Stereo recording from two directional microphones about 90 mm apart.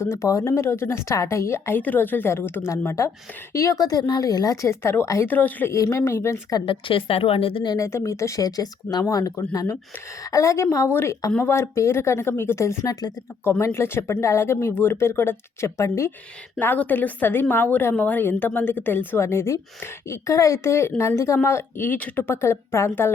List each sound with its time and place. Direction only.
0.0 s a woman's voice: 35° left (ahead or behind)
5.7 s a woman's voice: 35° left (ahead or behind)
6.7 s speech: 75° left (ahead or behind)
7.8 s a woman's voice: 35° left (ahead or behind)
13.4 s a woman's voice: 30° left (ahead or behind)
16.6 s a woman's voice: 20° left (ahead or behind)